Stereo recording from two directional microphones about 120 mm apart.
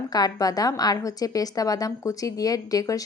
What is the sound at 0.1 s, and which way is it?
A woman's voice, 30° left (ahead or behind).